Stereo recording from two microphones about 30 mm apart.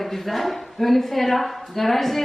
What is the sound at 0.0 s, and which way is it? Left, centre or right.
A woman's voice, centre.